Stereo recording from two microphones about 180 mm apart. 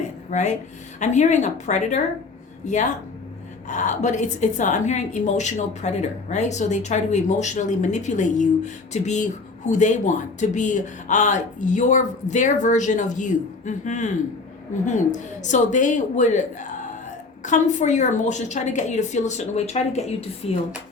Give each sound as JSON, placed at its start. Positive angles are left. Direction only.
{"t": 0.3, "sound": "a woman's voice", "side_deg": 40}